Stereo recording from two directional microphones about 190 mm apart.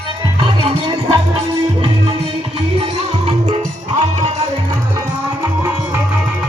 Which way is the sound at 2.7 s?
25° right (ahead or behind).